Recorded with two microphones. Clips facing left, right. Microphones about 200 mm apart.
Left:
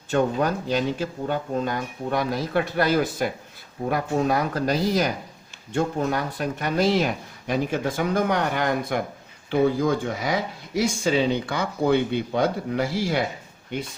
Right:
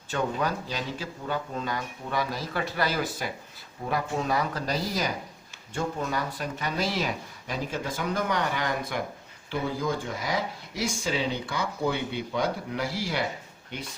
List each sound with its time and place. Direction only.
0.1 s speech: 50° left (ahead or behind)